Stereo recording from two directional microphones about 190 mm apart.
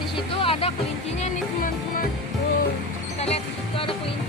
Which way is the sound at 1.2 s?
45° left (ahead or behind).